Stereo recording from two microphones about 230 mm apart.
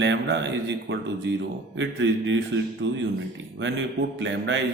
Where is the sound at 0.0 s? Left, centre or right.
Right.